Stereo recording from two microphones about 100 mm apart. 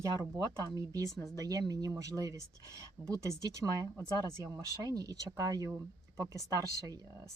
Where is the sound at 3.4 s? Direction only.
35° right (ahead or behind).